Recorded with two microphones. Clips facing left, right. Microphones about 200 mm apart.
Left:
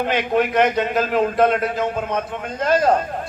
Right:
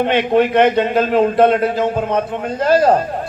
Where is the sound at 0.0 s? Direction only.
30° right (ahead or behind).